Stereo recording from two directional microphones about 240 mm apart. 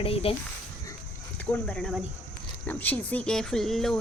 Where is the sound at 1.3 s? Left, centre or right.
Centre.